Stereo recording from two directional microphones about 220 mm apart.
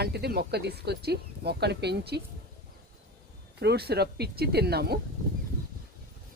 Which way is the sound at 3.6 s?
45° right (ahead or behind).